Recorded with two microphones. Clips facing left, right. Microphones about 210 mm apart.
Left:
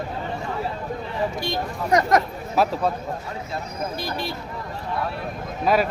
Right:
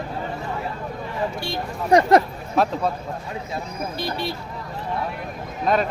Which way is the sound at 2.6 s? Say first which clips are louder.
Even; 5° left (ahead or behind).